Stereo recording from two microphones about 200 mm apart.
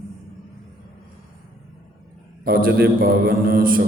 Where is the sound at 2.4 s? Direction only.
50° right (ahead or behind).